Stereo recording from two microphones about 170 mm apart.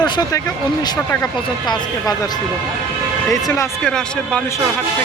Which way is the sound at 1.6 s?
25° left (ahead or behind).